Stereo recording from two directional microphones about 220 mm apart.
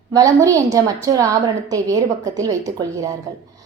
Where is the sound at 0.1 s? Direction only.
15° right (ahead or behind).